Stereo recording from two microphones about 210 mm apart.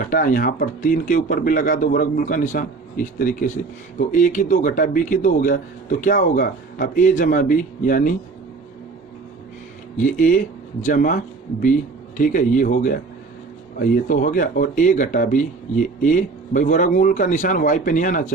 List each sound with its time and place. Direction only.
0.1 s speech: 40° left (ahead or behind)
10.0 s speech: 40° left (ahead or behind)